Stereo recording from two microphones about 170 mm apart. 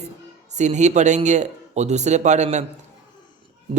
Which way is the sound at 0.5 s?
45° right (ahead or behind).